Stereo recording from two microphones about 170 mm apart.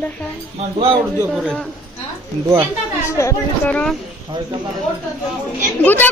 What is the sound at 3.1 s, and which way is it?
Speech, 15° left (ahead or behind).